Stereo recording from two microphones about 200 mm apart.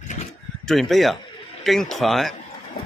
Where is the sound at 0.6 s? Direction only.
Centre (ahead or behind).